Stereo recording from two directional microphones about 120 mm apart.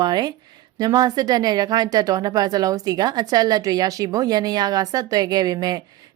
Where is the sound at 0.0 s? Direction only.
35° right (ahead or behind).